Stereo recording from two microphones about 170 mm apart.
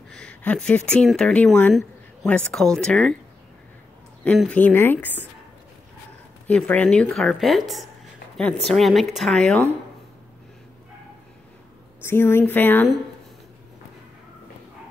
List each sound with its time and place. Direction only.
0.1 s speech: 5° left (ahead or behind)
4.4 s speech: 10° left (ahead or behind)
6.4 s speech: 10° left (ahead or behind)
12.0 s speech: 15° left (ahead or behind)